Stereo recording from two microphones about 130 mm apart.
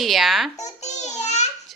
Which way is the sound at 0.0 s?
Centre (ahead or behind).